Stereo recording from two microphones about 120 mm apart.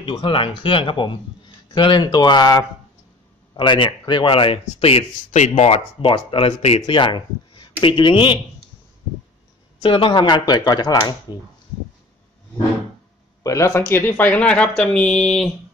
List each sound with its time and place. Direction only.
0.0 s speech: 45° left (ahead or behind)
4.6 s speech: 55° left (ahead or behind)
5.6 s speech: 50° left (ahead or behind)
9.8 s speech: 45° left (ahead or behind)
13.4 s speech: 25° left (ahead or behind); by 15.5 s 5° left (ahead or behind)